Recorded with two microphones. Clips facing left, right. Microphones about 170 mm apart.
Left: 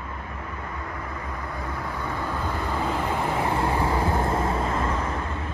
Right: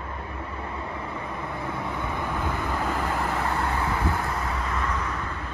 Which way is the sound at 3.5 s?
30° left (ahead or behind).